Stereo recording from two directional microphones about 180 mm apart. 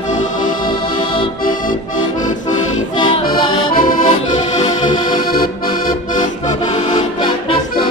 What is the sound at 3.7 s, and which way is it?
Accordion, 50° left (ahead or behind).